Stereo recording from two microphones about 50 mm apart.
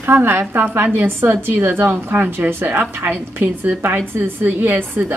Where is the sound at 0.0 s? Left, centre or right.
Right.